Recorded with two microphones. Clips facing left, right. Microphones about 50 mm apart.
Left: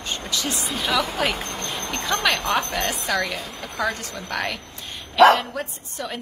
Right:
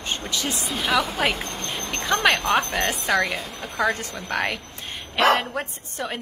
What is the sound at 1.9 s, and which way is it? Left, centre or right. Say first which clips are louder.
A woman's voice: right 2 dB; right.